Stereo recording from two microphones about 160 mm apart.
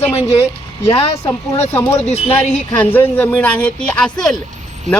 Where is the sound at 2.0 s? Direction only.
40° left (ahead or behind).